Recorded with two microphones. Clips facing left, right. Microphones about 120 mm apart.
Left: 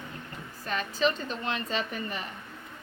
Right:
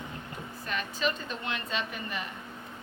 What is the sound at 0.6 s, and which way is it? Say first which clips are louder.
A woman's voice: left 4 dB; 35° left (ahead or behind).